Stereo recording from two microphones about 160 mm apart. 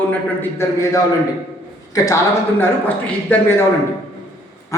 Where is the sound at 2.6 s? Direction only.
10° left (ahead or behind).